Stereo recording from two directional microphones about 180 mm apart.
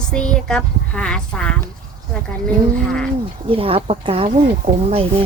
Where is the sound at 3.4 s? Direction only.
30° right (ahead or behind).